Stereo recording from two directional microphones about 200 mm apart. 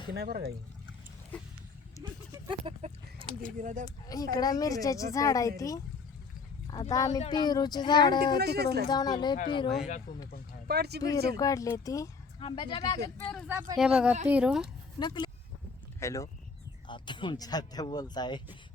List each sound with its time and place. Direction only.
0.1 s speech: 50° right (ahead or behind)
2.0 s speech: 15° right (ahead or behind)
3.6 s speech: 40° right (ahead or behind)
3.8 s speech: 20° left (ahead or behind)
6.9 s speech: 15° left (ahead or behind)
8.4 s speech: 55° right (ahead or behind)
8.9 s speech: 20° left (ahead or behind)
9.6 s speech: centre (ahead or behind)
10.7 s speech: 55° right (ahead or behind)
11.3 s speech: 15° left (ahead or behind)
13.5 s speech: 5° right (ahead or behind)
14.9 s speech: 20° left (ahead or behind)